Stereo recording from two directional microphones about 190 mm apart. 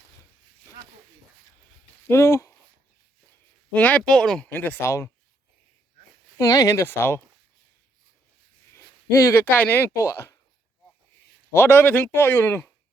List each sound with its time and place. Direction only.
2.0 s speech: 15° left (ahead or behind)
3.7 s speech: 5° left (ahead or behind)
6.3 s speech: 20° left (ahead or behind)
8.7 s speech: 15° left (ahead or behind)
11.5 s speech: 10° left (ahead or behind)